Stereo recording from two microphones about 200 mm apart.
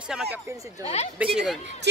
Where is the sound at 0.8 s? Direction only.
30° left (ahead or behind).